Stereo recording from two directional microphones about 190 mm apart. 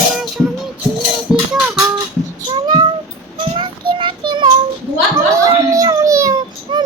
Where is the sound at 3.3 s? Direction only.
25° right (ahead or behind).